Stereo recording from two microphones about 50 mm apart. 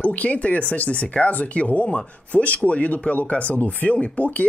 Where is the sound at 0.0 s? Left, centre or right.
Left.